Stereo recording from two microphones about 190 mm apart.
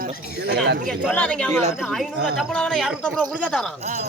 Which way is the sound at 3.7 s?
35° right (ahead or behind).